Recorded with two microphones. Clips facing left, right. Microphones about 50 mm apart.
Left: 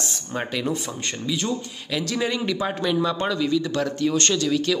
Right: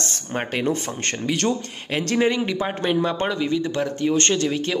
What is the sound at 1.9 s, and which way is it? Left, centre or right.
Speech, right.